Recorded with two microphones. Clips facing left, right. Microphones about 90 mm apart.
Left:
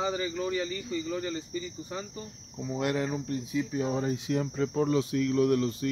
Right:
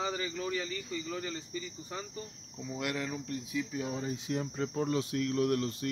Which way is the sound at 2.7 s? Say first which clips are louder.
Left 6 dB; 30° left (ahead or behind).